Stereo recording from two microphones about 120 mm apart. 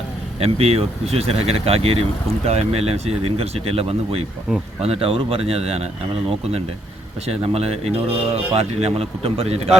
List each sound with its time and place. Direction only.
0.3 s speech: 55° right (ahead or behind)
7.3 s speech: 60° right (ahead or behind)